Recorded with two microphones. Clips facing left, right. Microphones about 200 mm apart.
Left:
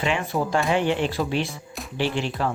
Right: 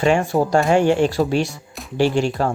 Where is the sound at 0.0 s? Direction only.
45° right (ahead or behind).